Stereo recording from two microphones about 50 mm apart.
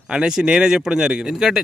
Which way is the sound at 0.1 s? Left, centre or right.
Centre.